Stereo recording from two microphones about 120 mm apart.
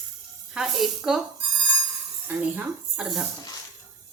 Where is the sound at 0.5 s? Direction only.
5° right (ahead or behind).